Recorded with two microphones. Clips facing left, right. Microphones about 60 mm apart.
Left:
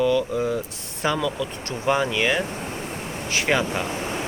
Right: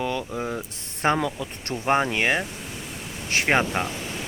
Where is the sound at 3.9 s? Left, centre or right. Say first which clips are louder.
Left 5 dB; left.